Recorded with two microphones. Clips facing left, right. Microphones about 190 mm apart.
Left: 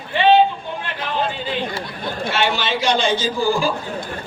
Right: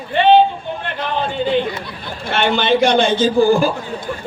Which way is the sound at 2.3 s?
55° right (ahead or behind).